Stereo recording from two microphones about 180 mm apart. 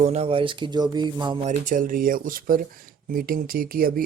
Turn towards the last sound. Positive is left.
turn(degrees=-55)  # may be behind; listen again after turning